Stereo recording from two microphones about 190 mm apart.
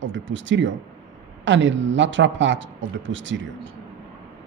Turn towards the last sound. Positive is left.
turn(degrees=-75)  # may be behind; listen again after turning